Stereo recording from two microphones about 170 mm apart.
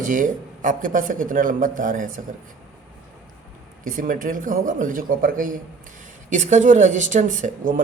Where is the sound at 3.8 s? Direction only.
50° right (ahead or behind).